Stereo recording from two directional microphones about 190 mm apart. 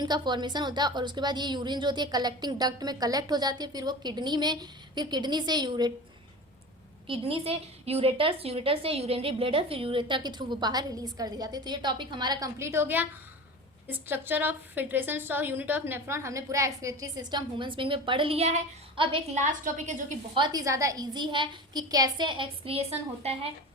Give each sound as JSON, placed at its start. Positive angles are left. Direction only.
{"t": 0.0, "sound": "a woman's voice", "side_deg": -20}
{"t": 7.1, "sound": "a woman's voice", "side_deg": -30}
{"t": 19.5, "sound": "a woman's voice", "side_deg": -40}
{"t": 20.3, "sound": "a woman's voice", "side_deg": -20}